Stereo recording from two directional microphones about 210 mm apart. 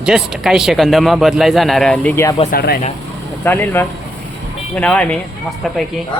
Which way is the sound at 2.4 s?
45° left (ahead or behind).